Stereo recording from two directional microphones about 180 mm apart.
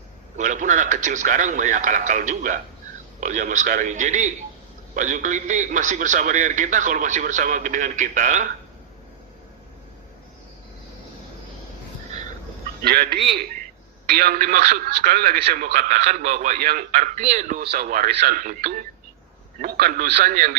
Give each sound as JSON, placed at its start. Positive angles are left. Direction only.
{"t": 0.3, "sound": "a man's voice", "side_deg": -45}
{"t": 12.8, "sound": "a man's voice", "side_deg": -60}
{"t": 17.6, "sound": "a man's voice", "side_deg": -55}